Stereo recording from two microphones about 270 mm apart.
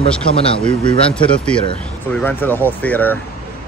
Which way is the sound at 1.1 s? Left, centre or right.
Centre.